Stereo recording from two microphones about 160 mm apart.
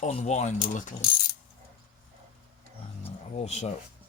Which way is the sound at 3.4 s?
40° left (ahead or behind).